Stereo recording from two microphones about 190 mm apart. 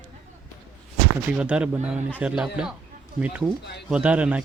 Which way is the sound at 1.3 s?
5° right (ahead or behind).